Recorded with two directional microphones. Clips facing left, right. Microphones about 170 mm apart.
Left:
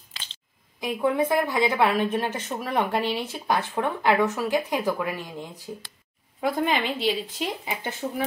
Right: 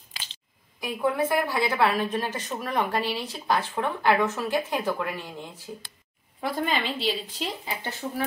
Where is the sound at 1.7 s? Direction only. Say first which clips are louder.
Left 2 dB; 20° left (ahead or behind).